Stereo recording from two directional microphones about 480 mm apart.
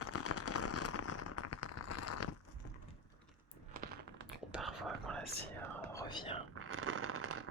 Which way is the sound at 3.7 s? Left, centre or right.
Centre.